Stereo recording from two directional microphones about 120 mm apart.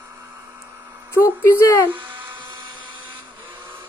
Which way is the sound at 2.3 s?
40° right (ahead or behind).